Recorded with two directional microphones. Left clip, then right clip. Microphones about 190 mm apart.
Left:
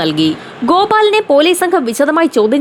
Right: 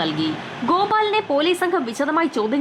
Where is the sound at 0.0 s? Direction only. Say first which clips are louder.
Left 9 dB; 30° left (ahead or behind).